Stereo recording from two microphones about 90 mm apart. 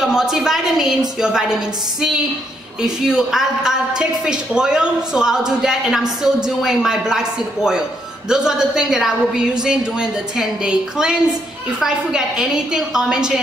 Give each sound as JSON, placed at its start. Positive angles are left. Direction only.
{"t": 0.0, "sound": "a woman's voice", "side_deg": -5}